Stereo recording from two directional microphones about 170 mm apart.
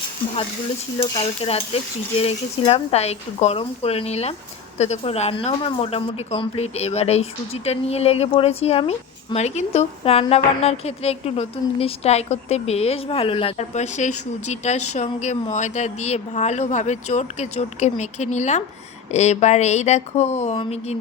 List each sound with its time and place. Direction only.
1.1 s speech: 35° left (ahead or behind)